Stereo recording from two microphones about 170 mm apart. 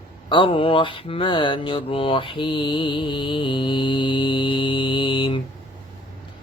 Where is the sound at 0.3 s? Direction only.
30° left (ahead or behind).